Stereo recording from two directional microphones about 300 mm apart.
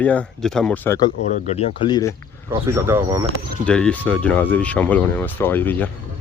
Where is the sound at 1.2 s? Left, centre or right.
Left.